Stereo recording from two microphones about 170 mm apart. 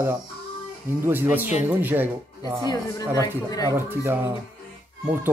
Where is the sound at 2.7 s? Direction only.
20° left (ahead or behind).